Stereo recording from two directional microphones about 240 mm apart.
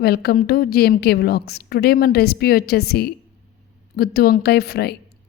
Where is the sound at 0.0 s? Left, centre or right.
Left.